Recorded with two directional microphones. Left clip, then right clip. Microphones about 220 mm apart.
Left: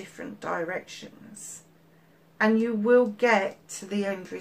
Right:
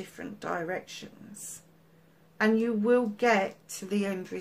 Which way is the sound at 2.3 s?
35° right (ahead or behind).